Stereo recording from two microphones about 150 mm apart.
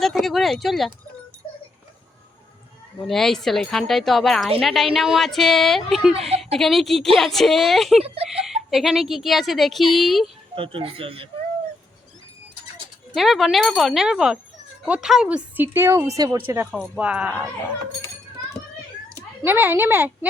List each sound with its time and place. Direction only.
0.0 s speech: centre (ahead or behind)
3.0 s speech: 5° left (ahead or behind)
6.1 s a woman's voice: 45° right (ahead or behind)
6.6 s speech: centre (ahead or behind)
8.0 s speech: 40° right (ahead or behind)
8.7 s speech: centre (ahead or behind)
10.5 s speech: 35° right (ahead or behind)
13.1 s a woman's voice: centre (ahead or behind); by 16.4 s 25° right (ahead or behind)
16.7 s speech: centre (ahead or behind)
19.5 s a woman's voice: 15° right (ahead or behind)